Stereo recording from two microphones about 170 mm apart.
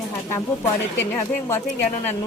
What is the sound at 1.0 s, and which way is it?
Speech, 15° left (ahead or behind).